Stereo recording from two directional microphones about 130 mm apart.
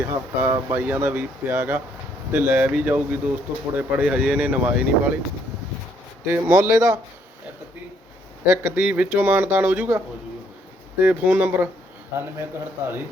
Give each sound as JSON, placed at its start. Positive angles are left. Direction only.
{"t": 0.1, "sound": "speech", "side_deg": -20}
{"t": 6.2, "sound": "speech", "side_deg": -15}
{"t": 8.4, "sound": "speech", "side_deg": -15}
{"t": 11.0, "sound": "speech", "side_deg": -15}